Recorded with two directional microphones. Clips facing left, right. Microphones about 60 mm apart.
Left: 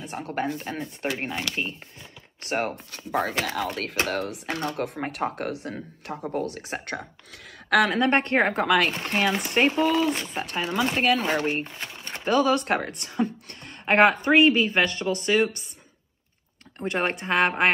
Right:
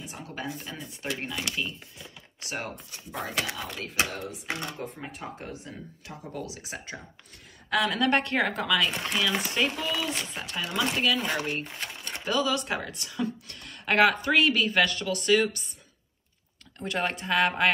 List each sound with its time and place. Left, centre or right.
0.0 s speech: left
7.9 s speech: left
16.7 s speech: left